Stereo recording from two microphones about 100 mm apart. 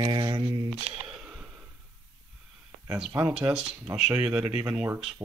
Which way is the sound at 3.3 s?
10° right (ahead or behind).